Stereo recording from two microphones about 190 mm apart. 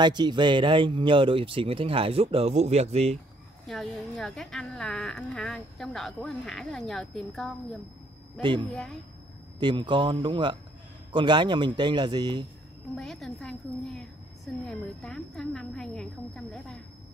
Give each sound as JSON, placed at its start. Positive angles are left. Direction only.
{"t": 0.0, "sound": "speech", "side_deg": -25}
{"t": 3.6, "sound": "a woman's voice", "side_deg": 0}
{"t": 8.4, "sound": "speech", "side_deg": -25}
{"t": 12.9, "sound": "a woman's voice", "side_deg": 0}